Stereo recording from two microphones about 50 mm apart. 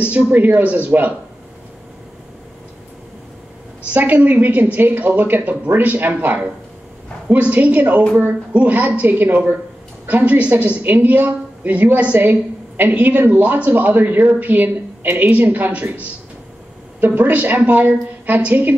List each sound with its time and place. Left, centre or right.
0.0 s a woman's voice: right
3.9 s a woman's voice: right